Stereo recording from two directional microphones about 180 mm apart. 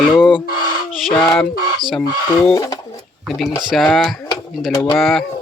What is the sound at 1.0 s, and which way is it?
Speech, 5° left (ahead or behind).